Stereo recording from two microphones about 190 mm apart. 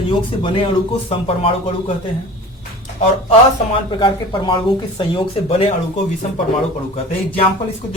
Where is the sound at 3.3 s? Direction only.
25° left (ahead or behind).